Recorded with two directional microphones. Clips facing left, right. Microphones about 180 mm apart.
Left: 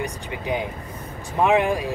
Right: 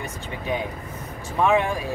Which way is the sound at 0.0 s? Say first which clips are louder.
Left 3 dB; 15° left (ahead or behind).